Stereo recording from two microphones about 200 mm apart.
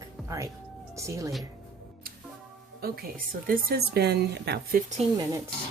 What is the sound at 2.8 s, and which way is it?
Speech, 50° right (ahead or behind).